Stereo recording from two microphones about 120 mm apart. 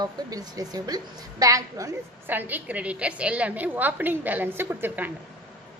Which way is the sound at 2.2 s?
15° right (ahead or behind).